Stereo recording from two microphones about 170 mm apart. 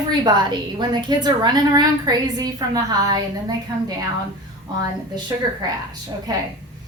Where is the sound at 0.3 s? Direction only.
25° right (ahead or behind).